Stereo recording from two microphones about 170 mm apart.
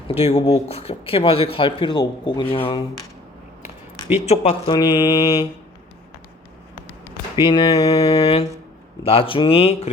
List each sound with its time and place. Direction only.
0.1 s speech: 40° left (ahead or behind)
4.3 s speech: 40° left (ahead or behind)
4.7 s mantra: 25° left (ahead or behind)
7.3 s mantra: 25° left (ahead or behind)
7.9 s speech: 35° left (ahead or behind)